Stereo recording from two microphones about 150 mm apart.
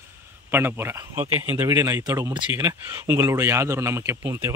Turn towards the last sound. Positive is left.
turn(degrees=-20)  # may be behind; listen again after turning